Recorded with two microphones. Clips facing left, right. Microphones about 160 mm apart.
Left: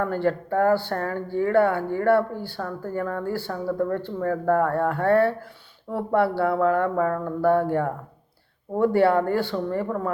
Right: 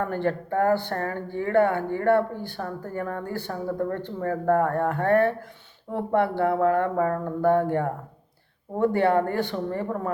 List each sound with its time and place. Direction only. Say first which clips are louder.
0.0 s speech: left 2 dB; 20° right (ahead or behind)